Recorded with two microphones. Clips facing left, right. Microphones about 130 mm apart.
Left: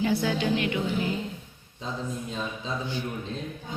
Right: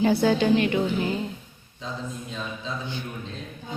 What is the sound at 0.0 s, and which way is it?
Speech, 35° right (ahead or behind).